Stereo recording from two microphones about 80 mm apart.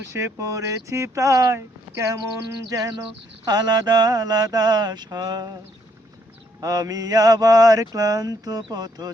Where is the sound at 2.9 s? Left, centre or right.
Right.